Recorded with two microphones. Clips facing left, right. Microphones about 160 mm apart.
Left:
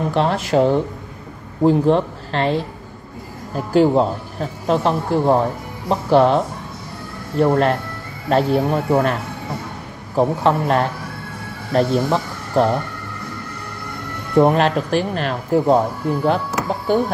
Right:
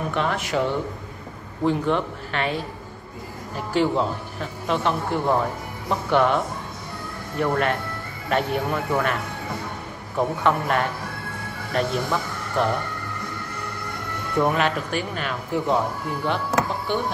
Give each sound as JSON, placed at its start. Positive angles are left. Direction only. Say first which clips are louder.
{"t": 0.1, "sound": "speech", "louder": "left 7 dB", "side_deg": 30}
{"t": 14.4, "sound": "speech", "louder": "left 7 dB", "side_deg": 35}